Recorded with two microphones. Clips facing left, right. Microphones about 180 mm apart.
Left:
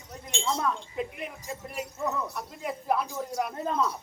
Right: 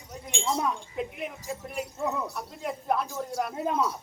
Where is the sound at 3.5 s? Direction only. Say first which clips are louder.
Right 3 dB; 15° right (ahead or behind).